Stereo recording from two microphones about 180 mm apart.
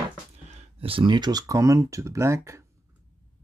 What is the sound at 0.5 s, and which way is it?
Speech, 35° right (ahead or behind).